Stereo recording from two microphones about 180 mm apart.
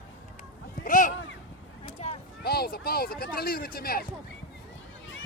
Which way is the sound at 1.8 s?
30° left (ahead or behind).